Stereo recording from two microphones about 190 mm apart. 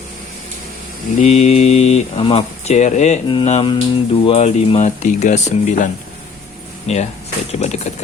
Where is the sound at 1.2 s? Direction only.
35° left (ahead or behind).